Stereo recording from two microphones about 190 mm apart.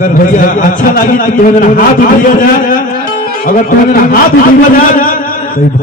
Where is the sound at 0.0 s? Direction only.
45° left (ahead or behind).